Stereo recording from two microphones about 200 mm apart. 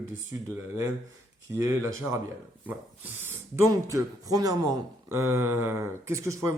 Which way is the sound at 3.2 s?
10° right (ahead or behind).